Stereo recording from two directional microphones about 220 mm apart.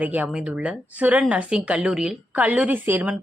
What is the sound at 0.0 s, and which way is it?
Speech, 5° right (ahead or behind).